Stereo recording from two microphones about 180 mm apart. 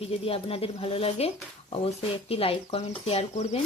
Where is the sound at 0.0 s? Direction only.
30° left (ahead or behind).